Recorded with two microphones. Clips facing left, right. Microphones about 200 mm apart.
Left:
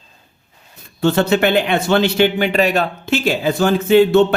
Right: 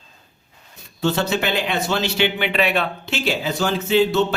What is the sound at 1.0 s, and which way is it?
A man's voice, 55° left (ahead or behind).